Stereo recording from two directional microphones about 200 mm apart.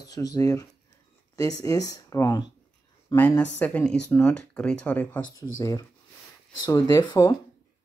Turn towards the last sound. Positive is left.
turn(degrees=20)  # may be behind; listen again after turning